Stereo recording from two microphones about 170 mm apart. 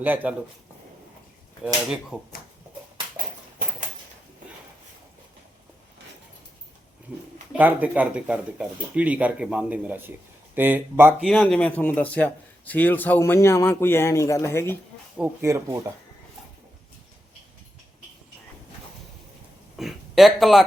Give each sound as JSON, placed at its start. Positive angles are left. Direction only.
{"t": 0.0, "sound": "speech", "side_deg": -10}
{"t": 1.6, "sound": "speech", "side_deg": 0}
{"t": 7.5, "sound": "speech", "side_deg": -10}
{"t": 11.3, "sound": "a man's voice", "side_deg": 5}
{"t": 15.2, "sound": "speech", "side_deg": -15}
{"t": 19.7, "sound": "a sound", "side_deg": 0}